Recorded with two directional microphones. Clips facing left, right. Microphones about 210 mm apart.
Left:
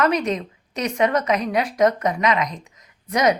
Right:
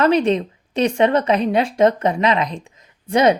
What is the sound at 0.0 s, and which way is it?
A woman's voice, 30° right (ahead or behind).